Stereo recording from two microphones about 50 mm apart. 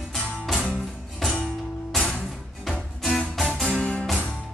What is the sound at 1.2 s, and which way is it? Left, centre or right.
Music, centre.